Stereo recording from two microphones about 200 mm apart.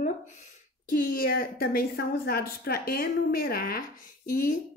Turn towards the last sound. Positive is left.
turn(degrees=40)  # may be behind; listen again after turning